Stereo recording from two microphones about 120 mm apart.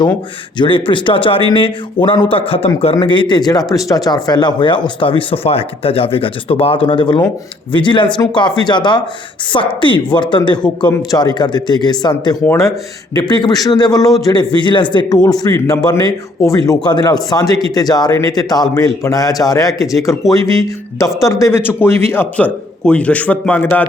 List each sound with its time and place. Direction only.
0.6 s a man's voice: 45° left (ahead or behind); by 20.1 s 30° left (ahead or behind)
21.2 s a man's voice: 25° left (ahead or behind)